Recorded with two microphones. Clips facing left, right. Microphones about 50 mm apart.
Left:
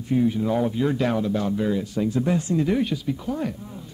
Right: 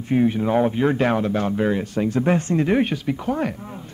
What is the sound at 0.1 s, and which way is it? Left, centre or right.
Speech, right.